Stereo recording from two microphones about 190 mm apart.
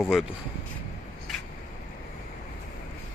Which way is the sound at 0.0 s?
Centre (ahead or behind).